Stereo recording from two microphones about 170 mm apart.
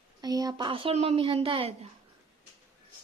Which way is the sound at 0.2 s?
20° right (ahead or behind).